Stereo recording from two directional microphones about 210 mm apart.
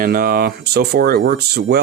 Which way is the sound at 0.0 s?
45° right (ahead or behind).